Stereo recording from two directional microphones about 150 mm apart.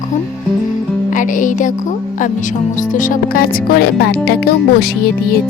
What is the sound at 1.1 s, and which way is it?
Speech, 60° left (ahead or behind).